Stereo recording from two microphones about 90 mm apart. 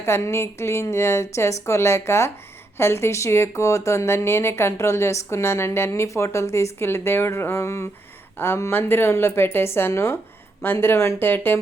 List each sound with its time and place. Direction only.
0.0 s a woman's voice: 30° left (ahead or behind)